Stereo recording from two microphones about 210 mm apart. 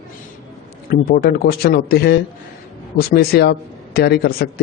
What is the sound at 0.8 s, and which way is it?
Speech, 45° left (ahead or behind).